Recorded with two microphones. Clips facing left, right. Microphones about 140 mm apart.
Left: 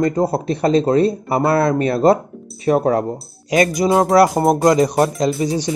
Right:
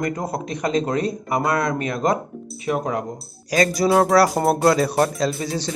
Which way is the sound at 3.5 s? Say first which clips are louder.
Left 2 dB; 25° left (ahead or behind).